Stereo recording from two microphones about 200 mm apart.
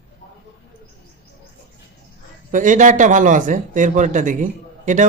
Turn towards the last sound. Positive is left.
turn(degrees=-40)  # may be behind; listen again after turning